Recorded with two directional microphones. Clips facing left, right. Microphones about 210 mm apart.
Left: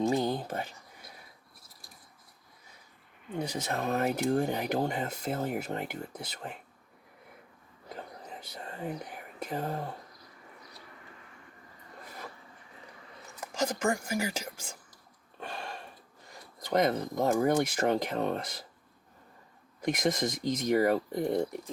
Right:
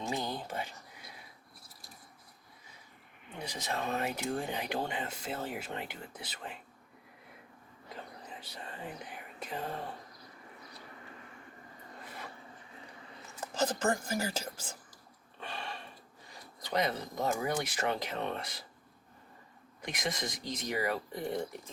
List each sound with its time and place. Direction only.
0.0 s speech: 45° left (ahead or behind)
3.3 s speech: 50° left (ahead or behind)
9.5 s speech: 40° left (ahead or behind)
13.4 s speech: 10° left (ahead or behind)
15.4 s a sound: 45° left (ahead or behind)
16.6 s speech: 45° left (ahead or behind)
19.8 s speech: 40° left (ahead or behind)